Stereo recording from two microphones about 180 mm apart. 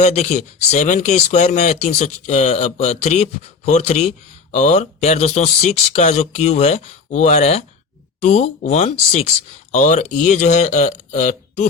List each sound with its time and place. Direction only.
0.0 s speech: 40° left (ahead or behind)